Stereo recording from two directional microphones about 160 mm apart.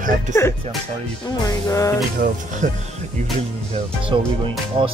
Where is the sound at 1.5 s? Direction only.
20° left (ahead or behind).